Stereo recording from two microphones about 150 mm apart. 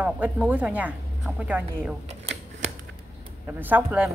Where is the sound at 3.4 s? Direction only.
10° right (ahead or behind).